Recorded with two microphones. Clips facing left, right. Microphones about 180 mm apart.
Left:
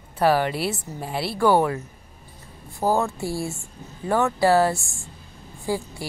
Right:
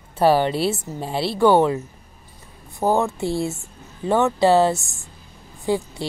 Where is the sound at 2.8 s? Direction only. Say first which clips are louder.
Right 3 dB; 20° right (ahead or behind).